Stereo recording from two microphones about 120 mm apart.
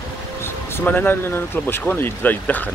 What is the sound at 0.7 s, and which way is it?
Speech, 15° left (ahead or behind).